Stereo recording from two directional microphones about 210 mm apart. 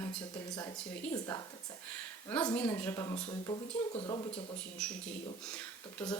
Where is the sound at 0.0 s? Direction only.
10° left (ahead or behind).